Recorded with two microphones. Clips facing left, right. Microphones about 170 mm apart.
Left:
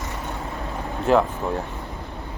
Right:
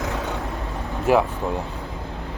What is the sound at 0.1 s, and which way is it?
Vehicle, 90° right.